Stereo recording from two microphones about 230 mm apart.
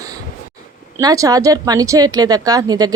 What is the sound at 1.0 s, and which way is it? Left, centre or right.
Speech, centre.